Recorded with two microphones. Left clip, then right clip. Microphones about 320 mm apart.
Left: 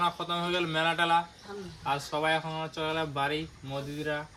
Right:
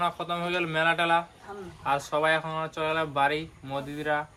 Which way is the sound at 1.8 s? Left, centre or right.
Centre.